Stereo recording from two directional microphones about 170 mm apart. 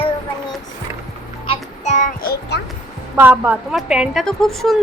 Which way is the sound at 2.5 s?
70° left (ahead or behind).